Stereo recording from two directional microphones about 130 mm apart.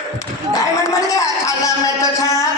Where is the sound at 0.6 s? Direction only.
25° left (ahead or behind).